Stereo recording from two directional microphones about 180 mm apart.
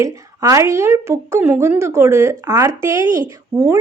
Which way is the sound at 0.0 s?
15° right (ahead or behind).